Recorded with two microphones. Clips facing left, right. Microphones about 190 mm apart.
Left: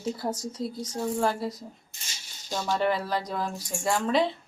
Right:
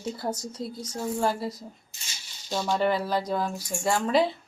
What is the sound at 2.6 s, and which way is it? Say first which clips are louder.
Speech: right 1 dB; centre (ahead or behind).